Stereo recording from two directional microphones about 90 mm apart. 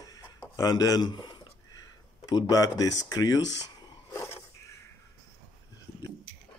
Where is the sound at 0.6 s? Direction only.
45° left (ahead or behind).